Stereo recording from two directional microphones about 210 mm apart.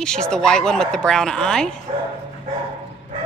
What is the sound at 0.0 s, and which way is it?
Speech, 5° left (ahead or behind).